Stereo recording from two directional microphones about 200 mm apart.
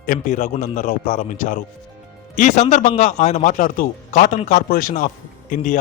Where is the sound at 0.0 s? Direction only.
40° left (ahead or behind).